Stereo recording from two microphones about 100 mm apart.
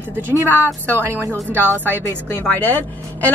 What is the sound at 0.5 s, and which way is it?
Speech, 20° left (ahead or behind).